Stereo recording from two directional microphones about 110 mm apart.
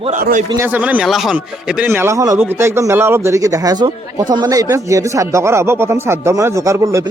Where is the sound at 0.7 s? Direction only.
15° right (ahead or behind).